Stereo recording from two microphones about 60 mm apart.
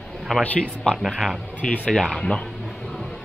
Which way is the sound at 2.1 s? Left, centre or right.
Centre.